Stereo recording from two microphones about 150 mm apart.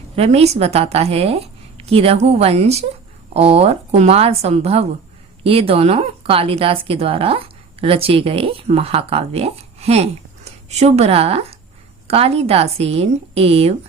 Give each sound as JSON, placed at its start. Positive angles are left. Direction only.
{"t": 0.2, "sound": "a woman's voice", "side_deg": -45}